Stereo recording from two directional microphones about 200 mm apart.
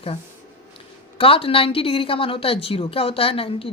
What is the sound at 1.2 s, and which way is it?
A woman's voice, 25° left (ahead or behind).